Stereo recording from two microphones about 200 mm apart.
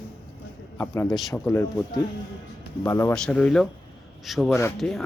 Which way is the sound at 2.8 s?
15° left (ahead or behind).